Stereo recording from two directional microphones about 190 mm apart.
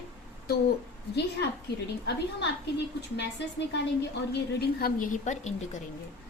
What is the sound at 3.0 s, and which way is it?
A woman's voice, 65° left (ahead or behind).